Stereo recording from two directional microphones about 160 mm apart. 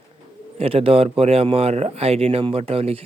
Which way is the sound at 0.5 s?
35° right (ahead or behind).